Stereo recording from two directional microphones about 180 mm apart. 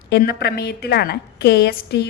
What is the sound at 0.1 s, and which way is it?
A woman's voice, 60° left (ahead or behind).